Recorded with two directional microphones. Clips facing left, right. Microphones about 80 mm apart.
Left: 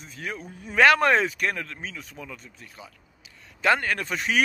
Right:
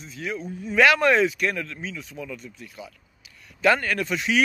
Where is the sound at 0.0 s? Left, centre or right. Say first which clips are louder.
Right 4 dB; left.